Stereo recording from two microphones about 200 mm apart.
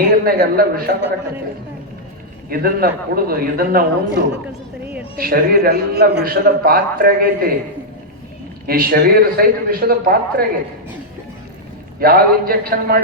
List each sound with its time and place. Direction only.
0.3 s a man's voice: 50° right (ahead or behind)
2.5 s a man's voice: 45° right (ahead or behind)
8.6 s a man's voice: 45° right (ahead or behind)
11.9 s a man's voice: 50° right (ahead or behind)